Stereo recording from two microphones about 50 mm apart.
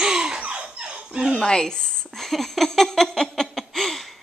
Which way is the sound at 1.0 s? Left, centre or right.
Centre.